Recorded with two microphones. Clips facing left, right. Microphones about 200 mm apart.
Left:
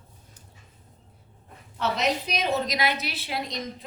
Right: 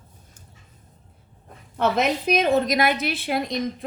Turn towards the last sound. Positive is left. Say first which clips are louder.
# right 7 dB
turn(degrees=-55)  # may be behind; listen again after turning